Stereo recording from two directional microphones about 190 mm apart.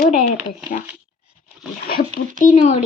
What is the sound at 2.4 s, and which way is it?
Speech, 35° left (ahead or behind).